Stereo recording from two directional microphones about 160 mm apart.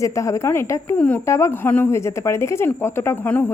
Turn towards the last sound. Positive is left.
turn(degrees=15)  # may be behind; listen again after turning